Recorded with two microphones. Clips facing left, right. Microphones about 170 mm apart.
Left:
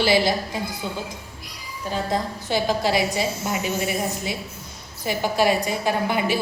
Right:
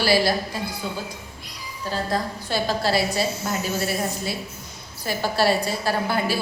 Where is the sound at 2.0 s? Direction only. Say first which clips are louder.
Left 1 dB; 15° left (ahead or behind).